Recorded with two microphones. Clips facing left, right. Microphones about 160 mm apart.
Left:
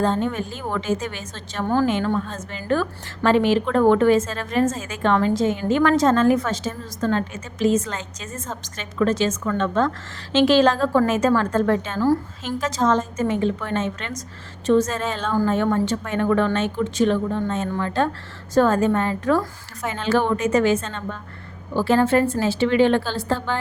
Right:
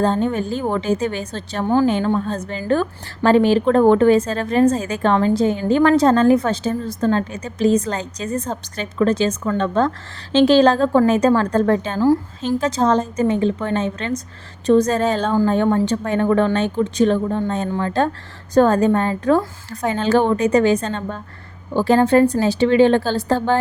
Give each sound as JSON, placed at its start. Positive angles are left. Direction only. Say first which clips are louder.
{"t": 0.0, "sound": "a woman's voice", "louder": "right 3 dB", "side_deg": -35}